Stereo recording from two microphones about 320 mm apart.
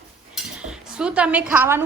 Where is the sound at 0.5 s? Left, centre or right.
Centre.